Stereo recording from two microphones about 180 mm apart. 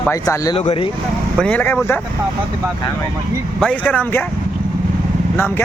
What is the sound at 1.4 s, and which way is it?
Speech, 10° left (ahead or behind).